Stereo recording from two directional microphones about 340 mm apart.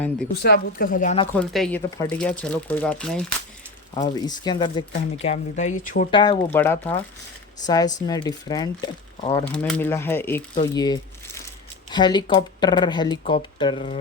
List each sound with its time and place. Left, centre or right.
0.4 s a woman's voice: left
1.4 s speech: centre
7.6 s speech: centre